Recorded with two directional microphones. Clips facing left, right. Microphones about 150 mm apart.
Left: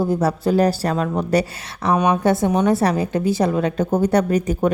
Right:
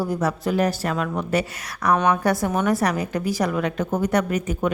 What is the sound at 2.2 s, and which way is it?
A woman's voice, 25° left (ahead or behind).